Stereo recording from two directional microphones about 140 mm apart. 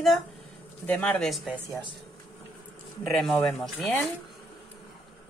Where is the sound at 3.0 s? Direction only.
Centre (ahead or behind).